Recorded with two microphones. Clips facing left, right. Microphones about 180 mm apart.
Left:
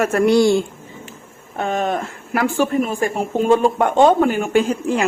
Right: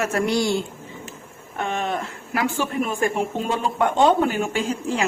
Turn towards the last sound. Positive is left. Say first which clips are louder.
# left 7 dB
turn(degrees=55)  # may be behind; listen again after turning